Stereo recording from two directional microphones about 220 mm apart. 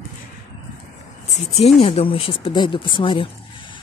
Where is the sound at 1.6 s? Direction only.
30° left (ahead or behind).